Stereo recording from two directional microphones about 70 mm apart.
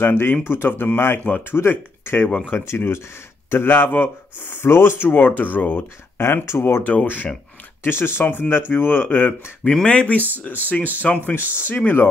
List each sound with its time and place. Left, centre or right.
0.0 s speech: left
6.8 s speech: left
7.8 s speech: left
9.7 s speech: centre